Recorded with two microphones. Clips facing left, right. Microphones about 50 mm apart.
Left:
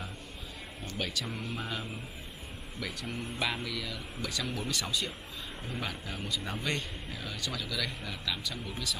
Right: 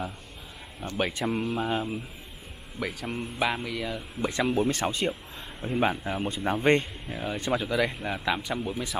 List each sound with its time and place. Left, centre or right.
0.9 s speech: right
1.3 s speech: right
3.1 s a man's voice: right